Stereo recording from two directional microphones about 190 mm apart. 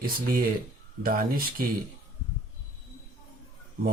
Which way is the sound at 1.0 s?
50° right (ahead or behind).